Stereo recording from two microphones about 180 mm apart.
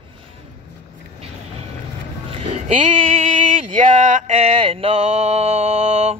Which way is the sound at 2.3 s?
35° right (ahead or behind).